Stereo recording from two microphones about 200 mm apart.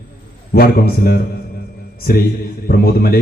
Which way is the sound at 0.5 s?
50° left (ahead or behind).